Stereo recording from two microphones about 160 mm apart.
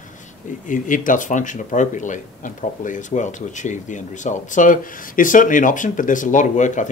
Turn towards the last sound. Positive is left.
turn(degrees=50)  # may be behind; listen again after turning